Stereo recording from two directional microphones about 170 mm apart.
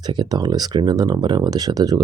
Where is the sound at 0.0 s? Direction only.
25° right (ahead or behind).